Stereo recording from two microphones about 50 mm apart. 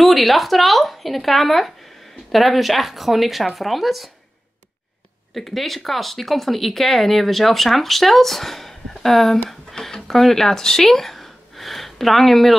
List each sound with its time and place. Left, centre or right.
0.0 s speech: centre
5.3 s speech: centre